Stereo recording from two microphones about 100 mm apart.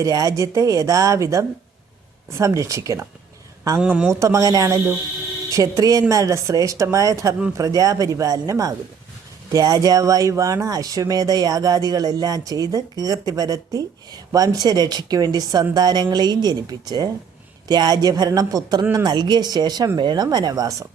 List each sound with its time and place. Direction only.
0.0 s speech: 35° right (ahead or behind)
3.8 s speech: 10° right (ahead or behind)
4.1 s a woman's voice: 30° right (ahead or behind)